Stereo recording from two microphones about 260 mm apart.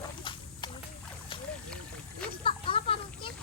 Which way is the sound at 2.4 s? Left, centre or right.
Left.